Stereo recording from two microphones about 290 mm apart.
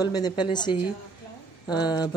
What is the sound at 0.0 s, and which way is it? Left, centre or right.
Speech, centre.